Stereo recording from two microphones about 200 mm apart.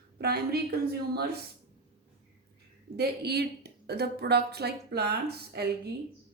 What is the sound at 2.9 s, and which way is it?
A woman's voice, 55° right (ahead or behind).